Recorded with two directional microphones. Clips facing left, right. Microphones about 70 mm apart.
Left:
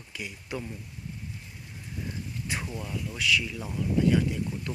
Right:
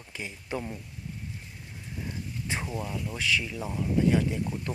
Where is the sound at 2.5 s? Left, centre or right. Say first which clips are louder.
Right 2 dB; right.